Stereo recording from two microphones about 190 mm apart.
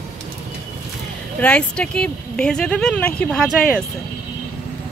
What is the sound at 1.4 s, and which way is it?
Speech, 5° left (ahead or behind).